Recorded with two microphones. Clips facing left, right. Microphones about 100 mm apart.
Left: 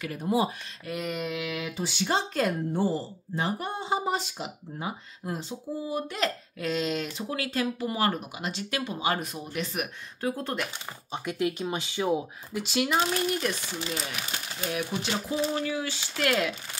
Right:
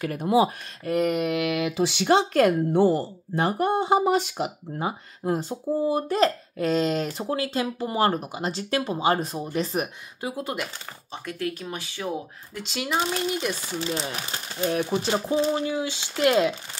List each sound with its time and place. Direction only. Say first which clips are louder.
0.1 s speech: right 5 dB; 65° right (ahead or behind); by 7.3 s 40° right (ahead or behind)
7.3 s speech: right 1 dB; 25° right (ahead or behind)
10.2 s speech: even; 10° right (ahead or behind)
11.1 s speech: left 2 dB; 15° left (ahead or behind)
12.6 s speech: even; centre (ahead or behind)
13.8 s speech: right 5 dB; 30° right (ahead or behind)
15.5 s speech: right 4 dB; 20° right (ahead or behind)